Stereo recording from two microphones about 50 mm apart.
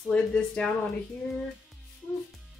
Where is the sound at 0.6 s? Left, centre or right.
Left.